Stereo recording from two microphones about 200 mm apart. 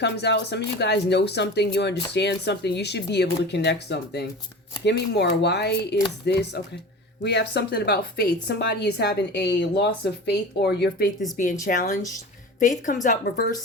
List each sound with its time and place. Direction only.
0.0 s a woman's voice: 55° left (ahead or behind)
11.6 s speech: 40° left (ahead or behind)